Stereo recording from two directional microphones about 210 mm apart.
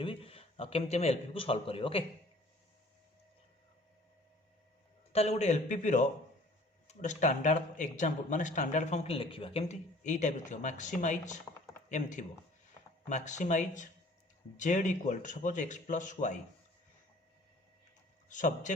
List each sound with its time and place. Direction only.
0.0 s a man's voice: 25° left (ahead or behind)
5.1 s speech: 30° left (ahead or behind)
18.3 s a man's voice: 35° left (ahead or behind)